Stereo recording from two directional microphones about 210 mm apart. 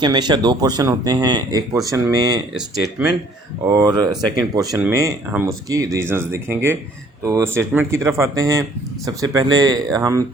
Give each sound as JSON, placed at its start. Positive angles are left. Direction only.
{"t": 0.0, "sound": "speech", "side_deg": -20}
{"t": 3.7, "sound": "speech", "side_deg": -20}